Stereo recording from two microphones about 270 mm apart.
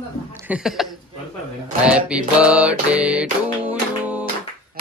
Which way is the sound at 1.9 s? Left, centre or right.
Centre.